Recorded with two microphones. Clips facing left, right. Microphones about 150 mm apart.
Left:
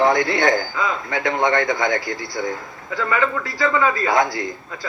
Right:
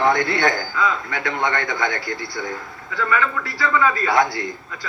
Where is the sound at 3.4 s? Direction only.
20° left (ahead or behind).